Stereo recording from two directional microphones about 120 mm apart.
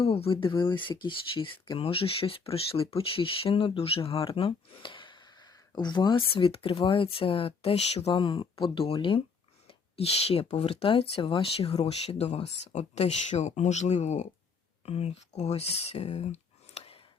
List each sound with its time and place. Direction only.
0.0 s speech: 50° left (ahead or behind)
8.1 s speech: 45° left (ahead or behind); by 14.3 s 70° left (ahead or behind)
14.8 s speech: 60° left (ahead or behind)